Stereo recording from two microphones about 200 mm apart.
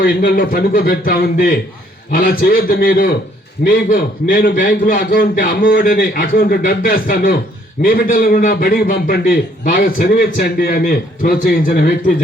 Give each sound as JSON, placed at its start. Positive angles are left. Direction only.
{"t": 0.0, "sound": "a man's voice", "side_deg": 50}